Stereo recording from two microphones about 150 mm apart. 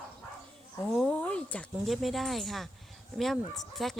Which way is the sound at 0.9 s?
5° left (ahead or behind).